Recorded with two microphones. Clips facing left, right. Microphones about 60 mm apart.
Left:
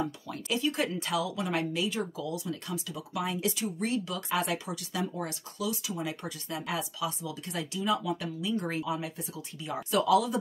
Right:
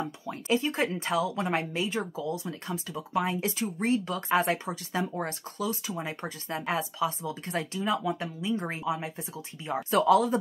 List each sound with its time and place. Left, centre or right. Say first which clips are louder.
0.3 s speech: right 6 dB; right